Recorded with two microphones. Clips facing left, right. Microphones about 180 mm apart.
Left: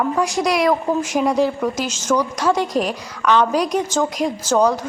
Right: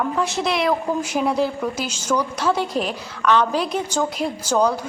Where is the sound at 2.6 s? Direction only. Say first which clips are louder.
Left 3 dB; 40° left (ahead or behind).